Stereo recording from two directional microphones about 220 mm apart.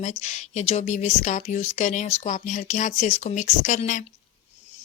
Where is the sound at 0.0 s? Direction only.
30° left (ahead or behind).